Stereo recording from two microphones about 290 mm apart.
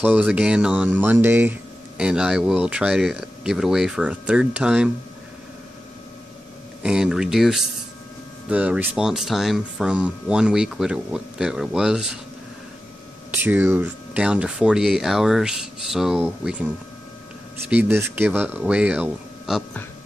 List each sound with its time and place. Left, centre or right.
0.0 s speech: centre
6.8 s speech: centre
13.3 s speech: centre